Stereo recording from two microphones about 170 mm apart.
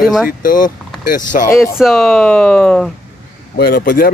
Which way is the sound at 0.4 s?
55° left (ahead or behind).